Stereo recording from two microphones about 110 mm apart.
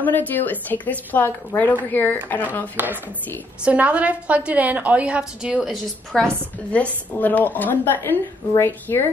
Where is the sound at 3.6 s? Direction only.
10° right (ahead or behind).